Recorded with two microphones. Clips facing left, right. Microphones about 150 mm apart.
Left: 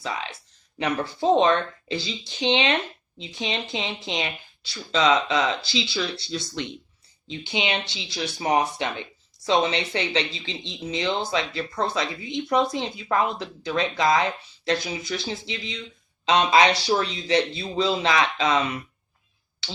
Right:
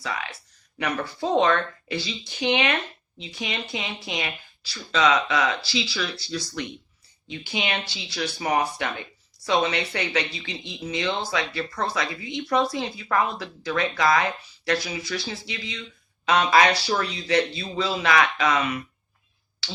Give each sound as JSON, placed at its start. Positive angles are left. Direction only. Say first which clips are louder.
{"t": 0.0, "sound": "speech", "louder": "left 1 dB", "side_deg": 25}